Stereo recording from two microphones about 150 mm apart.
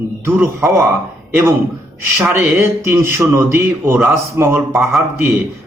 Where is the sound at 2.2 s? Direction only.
10° right (ahead or behind).